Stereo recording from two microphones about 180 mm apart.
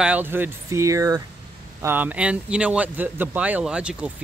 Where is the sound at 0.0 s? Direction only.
10° right (ahead or behind).